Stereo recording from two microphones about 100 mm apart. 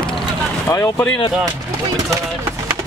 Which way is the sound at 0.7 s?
25° left (ahead or behind).